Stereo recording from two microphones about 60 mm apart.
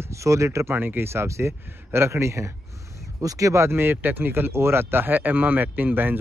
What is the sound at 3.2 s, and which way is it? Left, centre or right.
Speech, right.